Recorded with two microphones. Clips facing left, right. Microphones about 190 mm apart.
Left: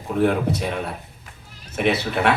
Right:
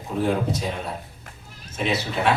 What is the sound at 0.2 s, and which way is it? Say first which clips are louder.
A man's voice: left 3 dB; 60° left (ahead or behind).